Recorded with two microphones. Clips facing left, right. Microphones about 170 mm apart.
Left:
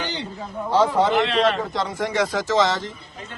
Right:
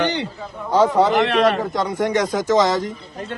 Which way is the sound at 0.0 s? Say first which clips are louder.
Right 8 dB; 65° right (ahead or behind).